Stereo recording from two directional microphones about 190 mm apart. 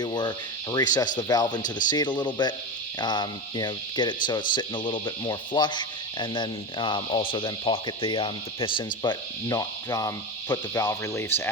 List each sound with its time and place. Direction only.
0.0 s speech: 20° left (ahead or behind)